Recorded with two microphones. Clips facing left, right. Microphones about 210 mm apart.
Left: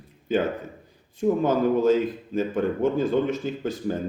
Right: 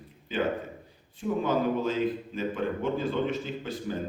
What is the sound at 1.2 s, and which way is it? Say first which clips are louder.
Speech: left 6 dB; 45° left (ahead or behind).